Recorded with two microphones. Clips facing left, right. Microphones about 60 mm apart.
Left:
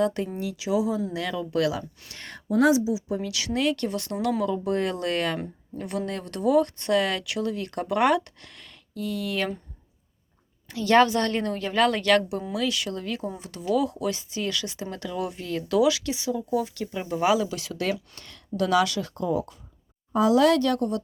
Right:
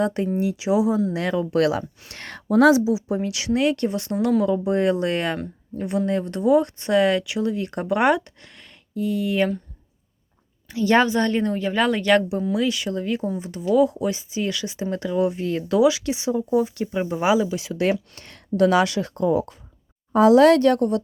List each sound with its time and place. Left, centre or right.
0.0 s speech: right
2.1 s a woman's voice: right
2.8 s speech: right
5.7 s speech: centre
10.7 s speech: centre
17.8 s speech: right